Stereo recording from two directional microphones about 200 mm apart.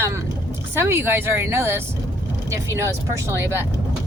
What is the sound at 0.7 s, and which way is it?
Speech, 10° right (ahead or behind).